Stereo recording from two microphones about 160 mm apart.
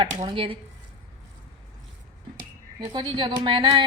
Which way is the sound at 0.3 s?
35° right (ahead or behind).